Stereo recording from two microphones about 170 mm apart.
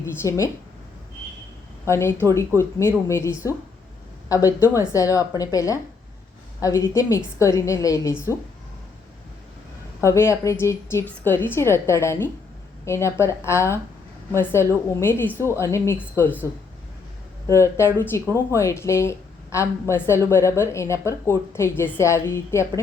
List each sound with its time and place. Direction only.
0.0 s speech: 15° left (ahead or behind)
1.8 s a woman's voice: 15° left (ahead or behind)
10.1 s speech: 15° left (ahead or behind)